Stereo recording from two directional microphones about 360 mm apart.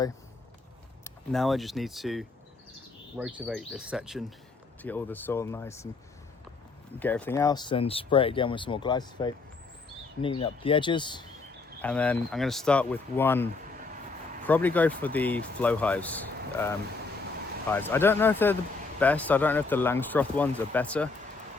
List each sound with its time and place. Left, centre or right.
1.0 s speech: centre
7.0 s speech: centre